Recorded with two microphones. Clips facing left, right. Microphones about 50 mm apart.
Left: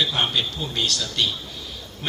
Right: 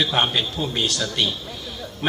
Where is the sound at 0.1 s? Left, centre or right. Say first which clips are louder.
Right 2 dB; right.